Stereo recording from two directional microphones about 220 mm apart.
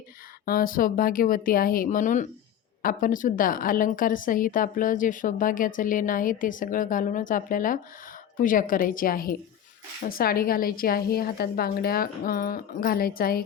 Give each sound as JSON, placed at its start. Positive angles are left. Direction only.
{"t": 0.4, "sound": "a woman's voice", "side_deg": 40}